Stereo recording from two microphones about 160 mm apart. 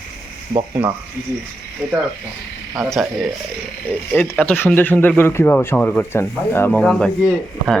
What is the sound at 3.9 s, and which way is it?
Speech, 10° left (ahead or behind).